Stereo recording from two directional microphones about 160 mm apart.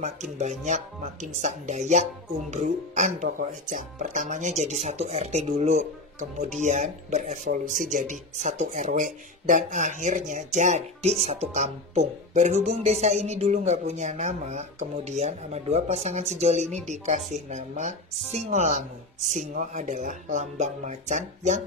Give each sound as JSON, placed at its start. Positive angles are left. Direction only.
{"t": 0.0, "sound": "speech", "side_deg": -45}